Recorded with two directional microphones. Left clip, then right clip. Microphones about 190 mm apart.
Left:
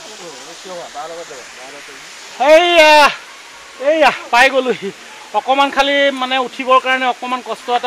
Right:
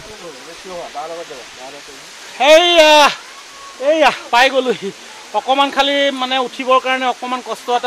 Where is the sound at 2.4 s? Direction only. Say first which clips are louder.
Even; 20° left (ahead or behind).